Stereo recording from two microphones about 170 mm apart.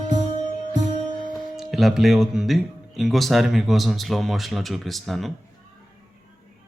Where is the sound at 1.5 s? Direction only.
Centre (ahead or behind).